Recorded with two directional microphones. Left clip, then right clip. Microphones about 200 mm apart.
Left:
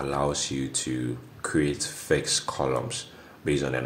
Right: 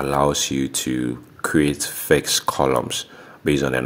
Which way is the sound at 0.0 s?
45° right (ahead or behind).